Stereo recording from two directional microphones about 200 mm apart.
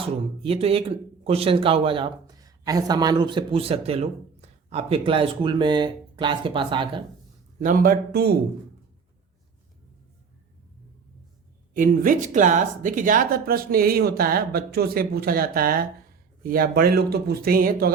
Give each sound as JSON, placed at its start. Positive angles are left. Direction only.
{"t": 0.4, "sound": "speech", "side_deg": -30}
{"t": 7.6, "sound": "speech", "side_deg": -45}
{"t": 11.7, "sound": "speech", "side_deg": -45}